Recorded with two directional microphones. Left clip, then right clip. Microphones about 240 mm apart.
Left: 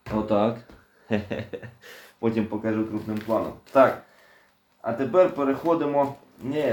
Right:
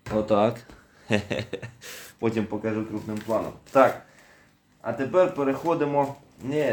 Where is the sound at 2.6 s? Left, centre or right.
Right.